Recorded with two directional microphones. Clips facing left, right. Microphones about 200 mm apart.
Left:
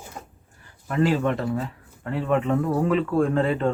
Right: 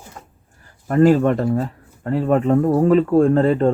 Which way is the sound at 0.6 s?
45° right (ahead or behind).